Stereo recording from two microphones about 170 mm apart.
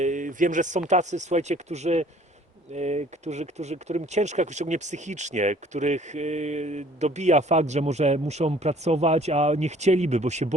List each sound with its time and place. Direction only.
0.0 s speech: 50° right (ahead or behind)